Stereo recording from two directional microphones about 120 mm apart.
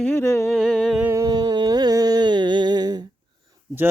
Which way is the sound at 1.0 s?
25° right (ahead or behind).